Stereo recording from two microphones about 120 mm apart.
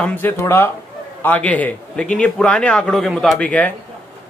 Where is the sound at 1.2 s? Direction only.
10° left (ahead or behind).